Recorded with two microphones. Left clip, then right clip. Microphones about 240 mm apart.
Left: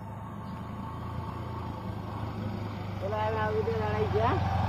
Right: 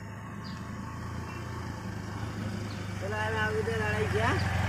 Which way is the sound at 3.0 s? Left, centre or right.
Right.